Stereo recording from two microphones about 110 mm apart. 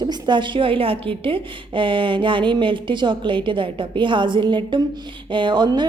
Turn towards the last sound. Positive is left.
turn(degrees=-40)  # may be behind; listen again after turning